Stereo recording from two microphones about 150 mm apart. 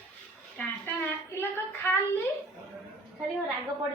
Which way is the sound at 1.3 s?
15° left (ahead or behind).